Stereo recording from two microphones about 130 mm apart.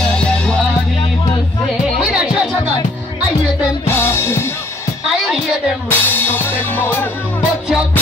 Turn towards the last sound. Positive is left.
turn(degrees=15)  # may be behind; listen again after turning